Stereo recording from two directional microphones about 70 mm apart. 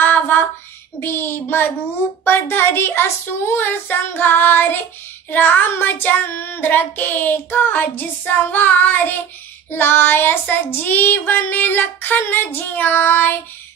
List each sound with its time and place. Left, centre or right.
0.0 s female singing: left
0.9 s child singing: left